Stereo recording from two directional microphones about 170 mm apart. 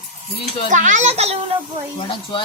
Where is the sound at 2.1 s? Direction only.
30° left (ahead or behind).